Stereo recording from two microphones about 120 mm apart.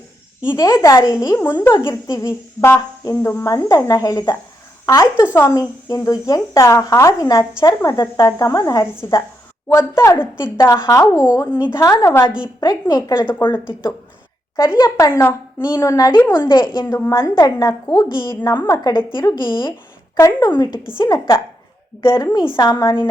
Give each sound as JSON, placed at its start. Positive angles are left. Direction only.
{"t": 0.5, "sound": "a woman's voice", "side_deg": 30}
{"t": 5.5, "sound": "a woman's voice", "side_deg": 30}
{"t": 17.1, "sound": "a woman's voice", "side_deg": 25}
{"t": 20.1, "sound": "a woman's voice", "side_deg": 30}